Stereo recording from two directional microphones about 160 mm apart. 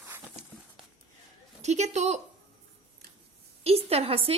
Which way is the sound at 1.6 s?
45° right (ahead or behind).